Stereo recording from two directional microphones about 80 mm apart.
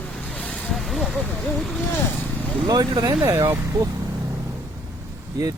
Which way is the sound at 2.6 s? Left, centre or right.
Right.